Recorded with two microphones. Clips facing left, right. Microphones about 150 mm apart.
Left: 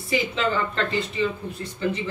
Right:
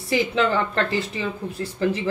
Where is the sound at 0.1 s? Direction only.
70° right (ahead or behind).